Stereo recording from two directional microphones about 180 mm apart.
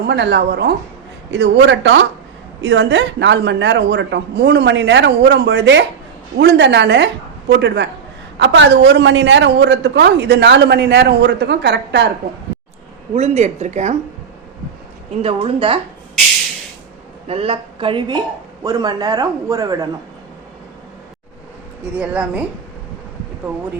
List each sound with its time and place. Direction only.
0.1 s a woman's voice: 70° right (ahead or behind)
6.3 s a woman's voice: 70° right (ahead or behind)
8.4 s a woman's voice: 80° right
13.1 s speech: 35° right (ahead or behind)
15.2 s speech: 30° right (ahead or behind)
17.2 s speech: 35° right (ahead or behind)
21.9 s speech: 10° right (ahead or behind)